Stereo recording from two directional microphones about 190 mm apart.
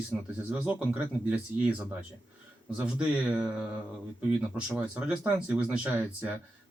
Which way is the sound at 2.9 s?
5° right (ahead or behind).